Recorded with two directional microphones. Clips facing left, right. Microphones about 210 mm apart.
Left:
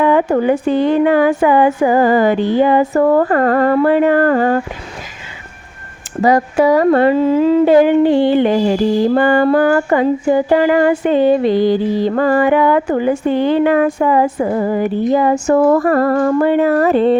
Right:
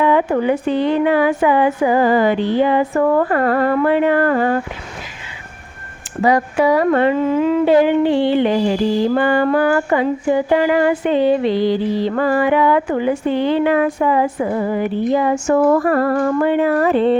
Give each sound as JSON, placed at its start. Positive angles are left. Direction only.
{"t": 0.0, "sound": "a woman's voice", "side_deg": 45}
{"t": 6.2, "sound": "a woman's voice", "side_deg": 40}